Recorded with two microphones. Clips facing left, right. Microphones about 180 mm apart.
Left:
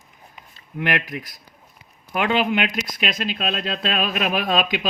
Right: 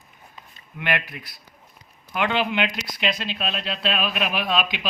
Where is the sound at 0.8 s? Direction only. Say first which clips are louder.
Left 3 dB; 45° left (ahead or behind).